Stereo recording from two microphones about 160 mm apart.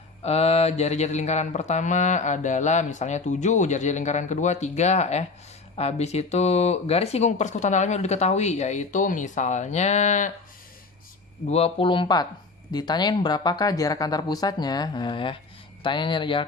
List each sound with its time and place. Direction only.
0.2 s speech: 40° left (ahead or behind)
11.5 s speech: 35° left (ahead or behind)